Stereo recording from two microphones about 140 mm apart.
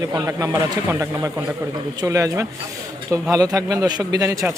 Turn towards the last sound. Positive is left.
turn(degrees=-25)  # may be behind; listen again after turning